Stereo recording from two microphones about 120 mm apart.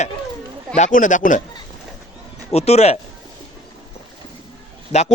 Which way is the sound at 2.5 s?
60° left (ahead or behind).